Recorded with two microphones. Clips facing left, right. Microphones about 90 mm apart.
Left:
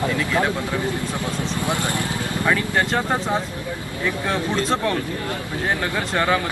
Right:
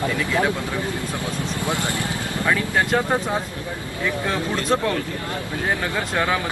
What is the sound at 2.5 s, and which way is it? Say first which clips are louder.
Speech: right 1 dB; 5° right (ahead or behind).